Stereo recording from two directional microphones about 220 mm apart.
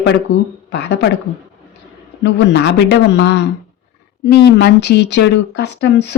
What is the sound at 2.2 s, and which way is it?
Speech, 50° left (ahead or behind).